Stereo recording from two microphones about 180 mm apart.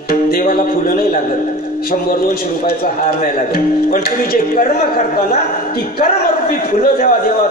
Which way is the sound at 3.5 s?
50° left (ahead or behind).